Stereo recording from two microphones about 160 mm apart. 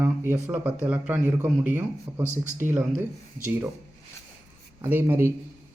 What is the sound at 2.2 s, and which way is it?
Speech, 50° right (ahead or behind).